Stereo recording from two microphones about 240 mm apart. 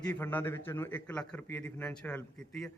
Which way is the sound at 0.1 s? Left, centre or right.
Centre.